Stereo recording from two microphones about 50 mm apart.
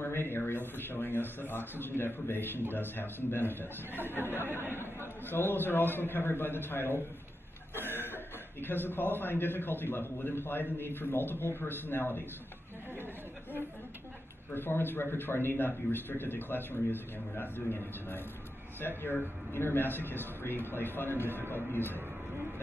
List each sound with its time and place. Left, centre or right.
0.0 s a sound: left
0.5 s a man's voice: left
5.2 s a man's voice: left
8.0 s a man's voice: left
14.5 s a man's voice: left